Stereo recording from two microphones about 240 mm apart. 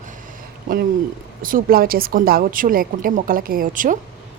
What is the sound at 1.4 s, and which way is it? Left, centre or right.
A woman's voice, right.